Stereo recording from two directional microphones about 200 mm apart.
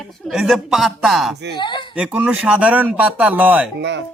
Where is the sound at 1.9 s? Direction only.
5° right (ahead or behind).